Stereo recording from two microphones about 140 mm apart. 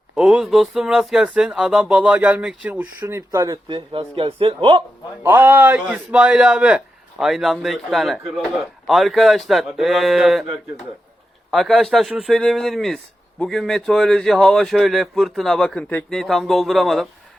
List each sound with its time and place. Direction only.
0.2 s speech: 5° right (ahead or behind)
3.0 s speech: 20° right (ahead or behind)
3.8 s a man's voice: 40° right (ahead or behind)
5.2 s speech: 15° right (ahead or behind)
11.5 s speech: centre (ahead or behind)